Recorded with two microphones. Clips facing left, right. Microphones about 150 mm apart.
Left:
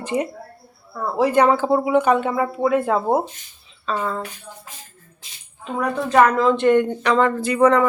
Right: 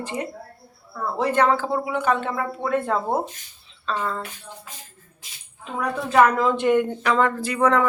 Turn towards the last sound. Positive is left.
turn(degrees=0)  # may be behind; listen again after turning